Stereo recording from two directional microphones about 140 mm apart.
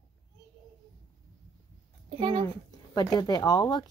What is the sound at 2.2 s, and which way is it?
Speech, 35° right (ahead or behind).